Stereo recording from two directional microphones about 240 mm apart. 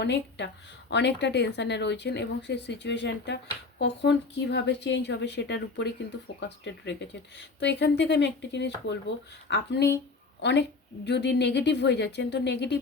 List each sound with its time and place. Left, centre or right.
0.0 s a woman's voice: left